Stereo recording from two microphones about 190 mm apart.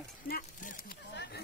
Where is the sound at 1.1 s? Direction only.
60° left (ahead or behind).